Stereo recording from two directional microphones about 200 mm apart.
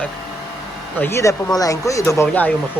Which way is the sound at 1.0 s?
15° left (ahead or behind).